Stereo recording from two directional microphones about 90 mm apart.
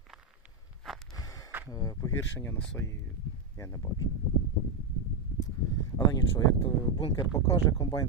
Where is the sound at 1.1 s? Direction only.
40° left (ahead or behind).